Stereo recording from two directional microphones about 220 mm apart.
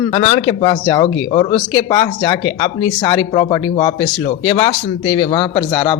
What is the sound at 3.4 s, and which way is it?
A man's voice, 15° left (ahead or behind).